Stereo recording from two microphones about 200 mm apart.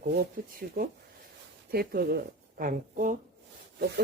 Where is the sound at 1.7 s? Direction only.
50° right (ahead or behind).